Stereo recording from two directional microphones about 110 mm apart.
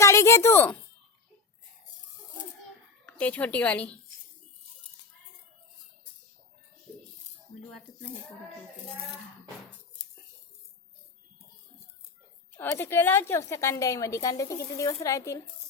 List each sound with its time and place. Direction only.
0.0 s speech: 25° left (ahead or behind)
3.1 s speech: 15° left (ahead or behind)
12.5 s a woman's voice: 20° left (ahead or behind)